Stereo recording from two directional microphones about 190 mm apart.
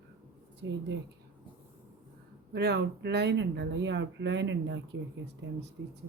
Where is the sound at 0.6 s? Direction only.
70° right (ahead or behind).